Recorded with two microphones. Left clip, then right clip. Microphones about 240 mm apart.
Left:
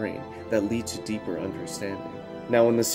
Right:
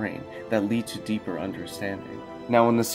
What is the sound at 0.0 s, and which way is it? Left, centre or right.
Speech, centre.